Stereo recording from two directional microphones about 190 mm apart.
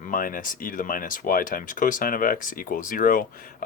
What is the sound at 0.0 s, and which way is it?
Speech, 45° left (ahead or behind).